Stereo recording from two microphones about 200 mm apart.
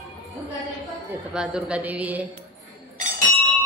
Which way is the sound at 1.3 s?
5° right (ahead or behind).